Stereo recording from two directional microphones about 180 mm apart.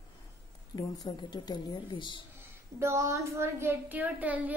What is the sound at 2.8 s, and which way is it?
A woman's voice, 15° right (ahead or behind).